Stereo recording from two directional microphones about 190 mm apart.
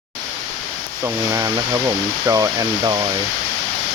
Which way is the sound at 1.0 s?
15° right (ahead or behind).